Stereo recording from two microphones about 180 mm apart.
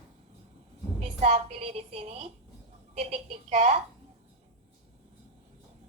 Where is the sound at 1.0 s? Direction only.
40° right (ahead or behind).